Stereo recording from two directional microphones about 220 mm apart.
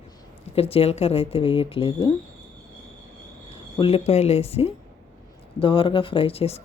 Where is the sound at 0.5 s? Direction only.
25° left (ahead or behind).